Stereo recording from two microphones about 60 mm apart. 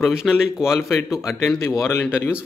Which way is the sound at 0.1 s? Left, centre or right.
Centre.